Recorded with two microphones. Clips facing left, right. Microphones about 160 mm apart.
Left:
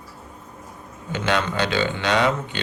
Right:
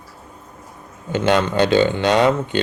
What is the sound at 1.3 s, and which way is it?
Speech, 45° right (ahead or behind).